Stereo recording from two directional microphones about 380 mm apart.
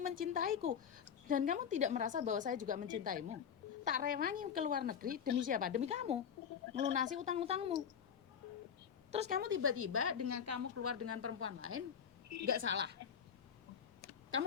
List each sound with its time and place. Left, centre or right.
0.2 s a woman's voice: right
9.1 s a woman's voice: centre